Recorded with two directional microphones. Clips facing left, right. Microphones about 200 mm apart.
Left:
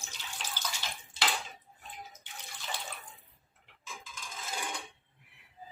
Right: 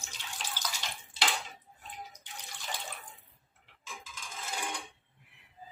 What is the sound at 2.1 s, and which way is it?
Bathtub, 5° left (ahead or behind).